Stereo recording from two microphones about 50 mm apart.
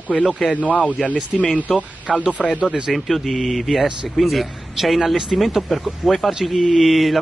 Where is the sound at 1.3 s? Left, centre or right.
Centre.